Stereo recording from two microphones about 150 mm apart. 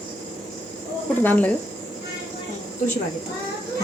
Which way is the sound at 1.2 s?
10° left (ahead or behind).